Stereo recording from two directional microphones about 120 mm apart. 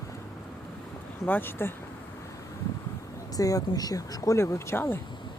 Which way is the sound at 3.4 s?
30° left (ahead or behind).